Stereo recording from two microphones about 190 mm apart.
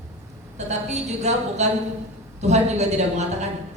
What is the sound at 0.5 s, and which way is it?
Speech, 35° right (ahead or behind).